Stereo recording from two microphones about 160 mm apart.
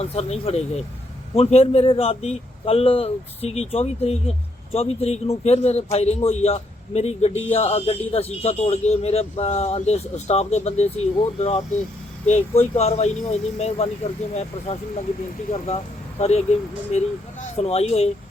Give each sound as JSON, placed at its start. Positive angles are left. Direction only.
{"t": 0.0, "sound": "speech", "side_deg": 40}
{"t": 15.6, "sound": "speech", "side_deg": 40}